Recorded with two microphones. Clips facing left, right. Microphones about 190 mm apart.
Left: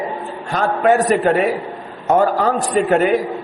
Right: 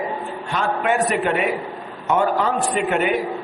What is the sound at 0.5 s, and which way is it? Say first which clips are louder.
A man's voice: left 6 dB; 40° left (ahead or behind).